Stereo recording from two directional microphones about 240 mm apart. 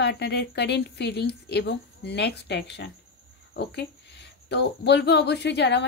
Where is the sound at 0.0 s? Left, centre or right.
Left.